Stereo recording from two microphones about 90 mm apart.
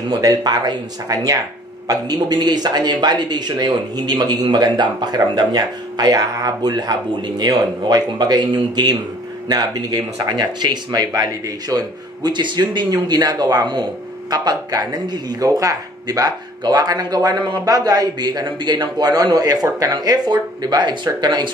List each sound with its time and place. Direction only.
0.2 s speech: 45° right (ahead or behind)